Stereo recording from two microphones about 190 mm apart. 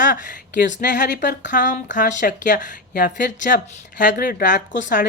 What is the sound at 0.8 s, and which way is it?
A woman's voice, 45° left (ahead or behind).